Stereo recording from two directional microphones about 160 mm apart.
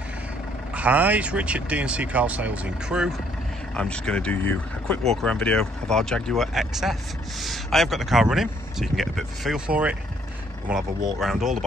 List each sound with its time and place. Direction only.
0.7 s speech: 10° right (ahead or behind)
3.7 s speech: 5° left (ahead or behind)
11.1 s speech: centre (ahead or behind)